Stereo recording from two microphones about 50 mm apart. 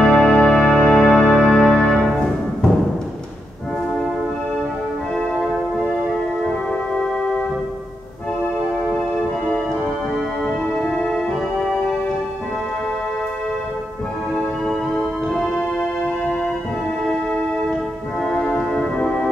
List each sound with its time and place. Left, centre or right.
0.0 s music: centre
10.4 s music: centre
14.3 s music: centre
18.3 s music: centre